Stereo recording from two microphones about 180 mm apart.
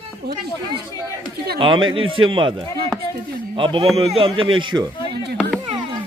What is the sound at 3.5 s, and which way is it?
A man's voice, 30° right (ahead or behind).